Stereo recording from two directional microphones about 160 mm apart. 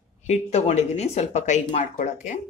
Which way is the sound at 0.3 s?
45° left (ahead or behind).